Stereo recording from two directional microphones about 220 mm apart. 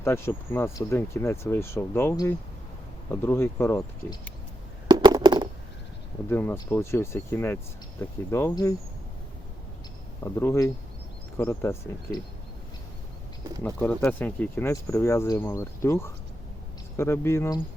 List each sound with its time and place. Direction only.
0.0 s speech: 10° left (ahead or behind)
4.9 s a sound: 20° right (ahead or behind)
6.2 s speech: 10° left (ahead or behind)
10.3 s speech: 10° left (ahead or behind)
13.6 s speech: 10° left (ahead or behind)